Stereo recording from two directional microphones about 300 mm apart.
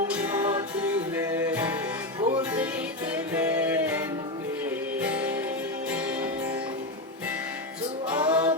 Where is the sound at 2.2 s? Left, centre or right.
Centre.